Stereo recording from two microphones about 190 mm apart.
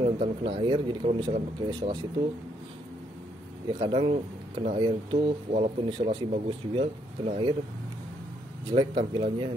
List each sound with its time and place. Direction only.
0.0 s speech: 30° right (ahead or behind)
3.8 s speech: 30° right (ahead or behind)
8.6 s speech: 25° right (ahead or behind)